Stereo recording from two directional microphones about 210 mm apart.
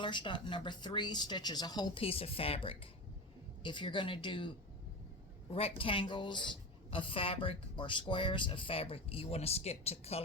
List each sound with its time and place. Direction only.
0.0 s a woman's voice: 20° left (ahead or behind)